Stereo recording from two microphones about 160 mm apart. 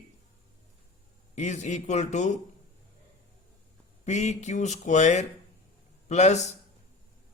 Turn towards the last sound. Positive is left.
turn(degrees=45)  # may be behind; listen again after turning